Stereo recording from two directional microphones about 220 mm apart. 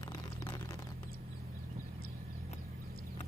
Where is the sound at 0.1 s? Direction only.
20° left (ahead or behind).